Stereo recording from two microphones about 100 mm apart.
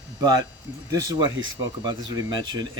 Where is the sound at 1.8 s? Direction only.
45° right (ahead or behind).